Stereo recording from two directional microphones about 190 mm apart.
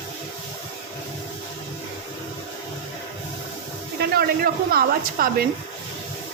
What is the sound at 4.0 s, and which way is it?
A woman's voice, 55° right (ahead or behind).